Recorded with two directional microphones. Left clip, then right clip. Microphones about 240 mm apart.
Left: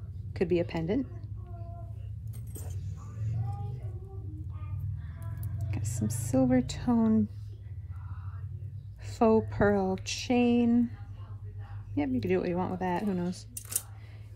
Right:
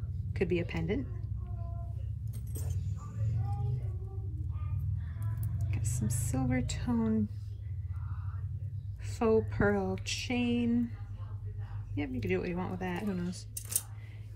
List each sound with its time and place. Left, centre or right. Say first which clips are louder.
0.3 s speech: left 4 dB; centre
5.7 s speech: left 3 dB; centre
9.0 s speech: left 3 dB; centre
11.9 s speech: left 5 dB; centre